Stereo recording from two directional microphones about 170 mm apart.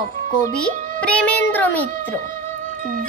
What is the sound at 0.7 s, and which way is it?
Child singing, 50° right (ahead or behind).